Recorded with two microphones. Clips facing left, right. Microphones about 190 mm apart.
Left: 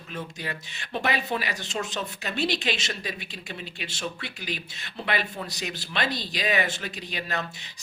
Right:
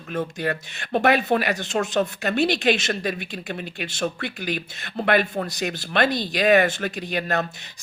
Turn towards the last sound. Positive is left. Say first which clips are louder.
# right 7 dB
turn(degrees=-50)  # may be behind; listen again after turning